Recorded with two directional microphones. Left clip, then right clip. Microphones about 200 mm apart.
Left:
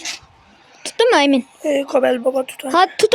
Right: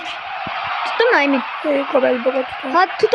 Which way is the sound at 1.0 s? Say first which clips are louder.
Left 2 dB; 45° left (ahead or behind).